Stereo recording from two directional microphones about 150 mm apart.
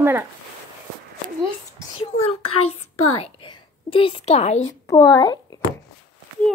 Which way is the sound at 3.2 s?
35° left (ahead or behind).